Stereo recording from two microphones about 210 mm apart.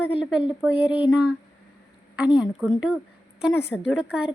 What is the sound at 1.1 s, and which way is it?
Speech, 5° right (ahead or behind).